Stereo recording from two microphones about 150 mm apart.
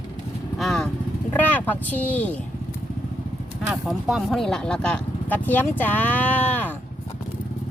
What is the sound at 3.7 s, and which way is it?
Speech, centre (ahead or behind).